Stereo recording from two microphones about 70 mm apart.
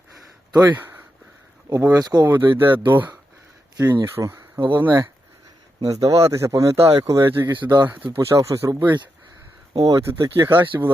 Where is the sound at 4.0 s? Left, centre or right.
Right.